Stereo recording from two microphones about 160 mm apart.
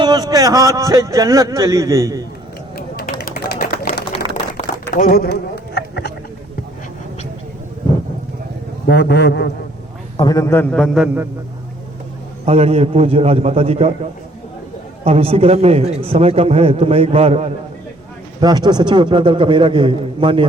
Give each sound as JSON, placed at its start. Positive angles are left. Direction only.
{"t": 0.0, "sound": "speech", "side_deg": -25}
{"t": 2.7, "sound": "a sound", "side_deg": 70}
{"t": 4.1, "sound": "a sound", "side_deg": 35}
{"t": 4.6, "sound": "a sound", "side_deg": 60}
{"t": 8.9, "sound": "a man's voice", "side_deg": 90}
{"t": 10.2, "sound": "a man's voice", "side_deg": 20}
{"t": 12.5, "sound": "a man's voice", "side_deg": -40}
{"t": 15.0, "sound": "a man's voice", "side_deg": -40}
{"t": 18.3, "sound": "speech", "side_deg": -25}